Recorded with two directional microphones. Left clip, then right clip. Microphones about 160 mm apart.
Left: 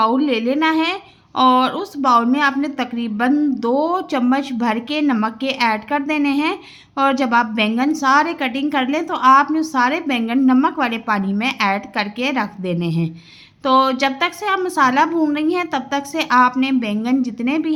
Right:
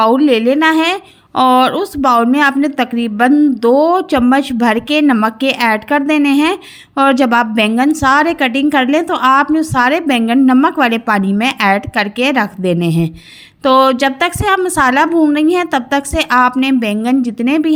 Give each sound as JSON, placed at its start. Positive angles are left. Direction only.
{"t": 0.0, "sound": "a woman's voice", "side_deg": -40}
{"t": 3.3, "sound": "a woman's voice", "side_deg": -30}